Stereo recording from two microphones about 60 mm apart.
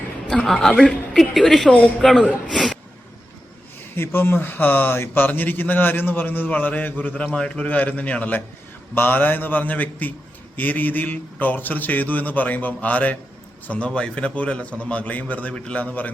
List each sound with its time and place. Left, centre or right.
0.4 s a woman's voice: centre
3.9 s a man's voice: left